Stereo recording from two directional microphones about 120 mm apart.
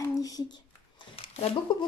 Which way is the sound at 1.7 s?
40° left (ahead or behind).